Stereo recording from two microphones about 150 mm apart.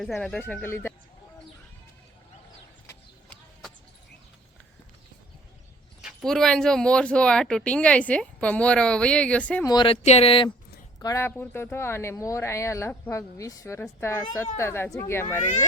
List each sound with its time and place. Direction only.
0.0 s speech: 5° left (ahead or behind)
6.0 s speech: centre (ahead or behind)
9.6 s speech: 35° left (ahead or behind)
10.0 s speech: 45° left (ahead or behind)
11.0 s speech: 20° left (ahead or behind)